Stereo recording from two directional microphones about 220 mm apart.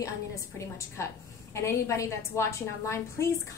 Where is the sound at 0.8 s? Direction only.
15° left (ahead or behind).